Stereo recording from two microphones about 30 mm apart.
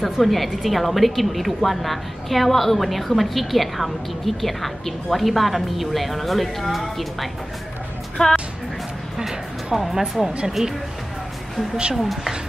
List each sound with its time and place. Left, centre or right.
0.0 s a woman's voice: centre
8.2 s speech: left
9.8 s speech: centre
11.9 s speech: centre